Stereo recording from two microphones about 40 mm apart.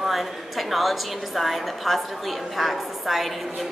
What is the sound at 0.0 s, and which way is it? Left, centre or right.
A woman's voice, centre.